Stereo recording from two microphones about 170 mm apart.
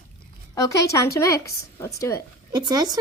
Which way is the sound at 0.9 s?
20° left (ahead or behind).